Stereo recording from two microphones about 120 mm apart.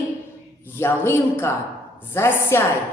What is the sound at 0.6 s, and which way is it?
A woman's voice, 20° left (ahead or behind).